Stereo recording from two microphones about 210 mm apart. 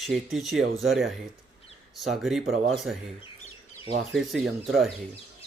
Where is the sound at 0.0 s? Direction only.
Centre (ahead or behind).